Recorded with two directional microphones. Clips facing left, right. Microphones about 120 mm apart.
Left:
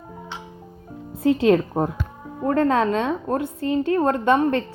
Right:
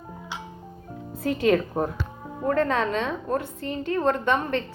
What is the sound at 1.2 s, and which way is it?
A woman's voice, 25° left (ahead or behind).